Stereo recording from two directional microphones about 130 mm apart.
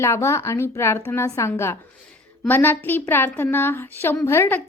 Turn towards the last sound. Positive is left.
turn(degrees=15)  # may be behind; listen again after turning